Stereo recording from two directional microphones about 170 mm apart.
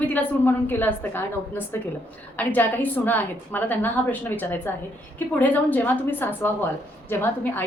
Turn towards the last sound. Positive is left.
turn(degrees=10)  # may be behind; listen again after turning